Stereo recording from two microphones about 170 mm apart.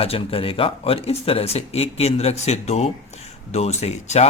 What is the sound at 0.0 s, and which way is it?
Speech, 35° left (ahead or behind).